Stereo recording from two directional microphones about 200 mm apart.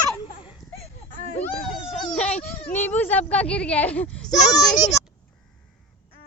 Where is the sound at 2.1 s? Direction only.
5° left (ahead or behind).